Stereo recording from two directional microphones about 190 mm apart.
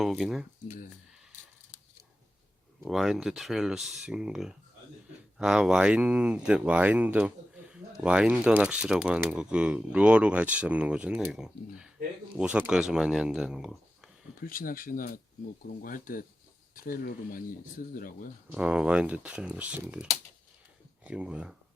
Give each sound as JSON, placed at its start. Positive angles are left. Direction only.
{"t": 0.0, "sound": "speech", "side_deg": 0}
{"t": 2.8, "sound": "speech", "side_deg": 0}
{"t": 14.4, "sound": "speech", "side_deg": 50}
{"t": 18.5, "sound": "speech", "side_deg": -5}